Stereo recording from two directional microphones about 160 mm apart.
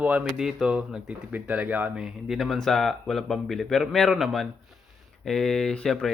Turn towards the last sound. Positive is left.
turn(degrees=5)  # may be behind; listen again after turning